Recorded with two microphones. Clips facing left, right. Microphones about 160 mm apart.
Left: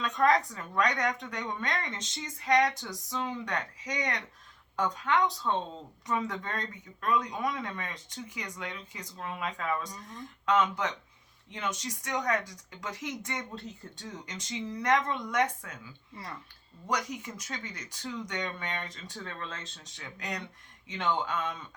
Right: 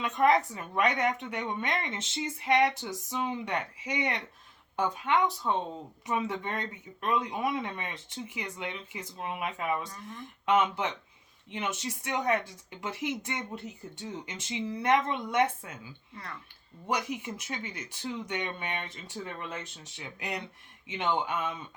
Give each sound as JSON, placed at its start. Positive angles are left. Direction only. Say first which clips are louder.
{"t": 0.0, "sound": "speech", "louder": "right 1 dB", "side_deg": -20}
{"t": 9.9, "sound": "speech", "louder": "right 1 dB", "side_deg": 20}
{"t": 10.4, "sound": "speech", "louder": "right 1 dB", "side_deg": -25}